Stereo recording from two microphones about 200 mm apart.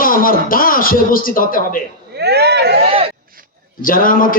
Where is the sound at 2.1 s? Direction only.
55° right (ahead or behind).